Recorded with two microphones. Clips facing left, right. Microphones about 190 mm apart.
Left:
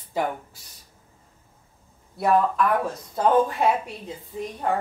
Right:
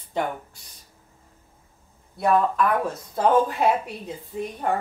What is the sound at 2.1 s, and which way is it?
Speech, 5° left (ahead or behind).